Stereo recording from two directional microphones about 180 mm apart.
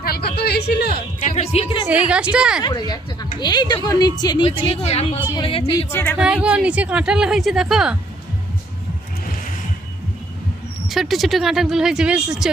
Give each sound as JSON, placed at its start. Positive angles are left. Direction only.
{"t": 0.0, "sound": "a sound", "side_deg": 60}
{"t": 1.2, "sound": "a woman's voice", "side_deg": 40}
{"t": 1.9, "sound": "a woman's voice", "side_deg": -5}
{"t": 2.6, "sound": "a woman's voice", "side_deg": 20}
{"t": 4.4, "sound": "a woman's voice", "side_deg": 35}
{"t": 5.9, "sound": "speech", "side_deg": 10}
{"t": 6.1, "sound": "a woman's voice", "side_deg": -5}
{"t": 10.8, "sound": "a woman's voice", "side_deg": 0}